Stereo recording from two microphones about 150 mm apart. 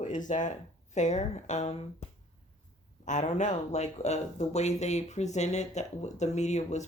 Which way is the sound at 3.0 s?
55° left (ahead or behind).